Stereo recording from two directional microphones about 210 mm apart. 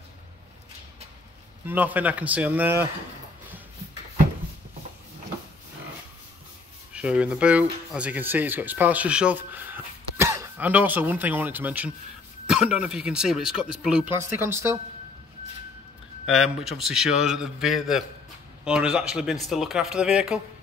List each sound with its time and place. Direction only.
1.7 s speech: 10° right (ahead or behind)
6.9 s speech: 5° right (ahead or behind)
16.3 s speech: centre (ahead or behind)